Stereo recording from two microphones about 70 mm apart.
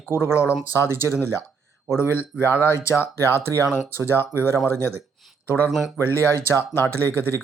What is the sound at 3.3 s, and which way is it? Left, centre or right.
Speech, right.